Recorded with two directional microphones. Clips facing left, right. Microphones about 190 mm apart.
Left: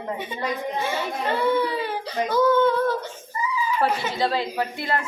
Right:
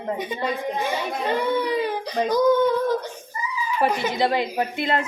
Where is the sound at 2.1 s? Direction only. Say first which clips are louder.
Right 1 dB; 15° right (ahead or behind).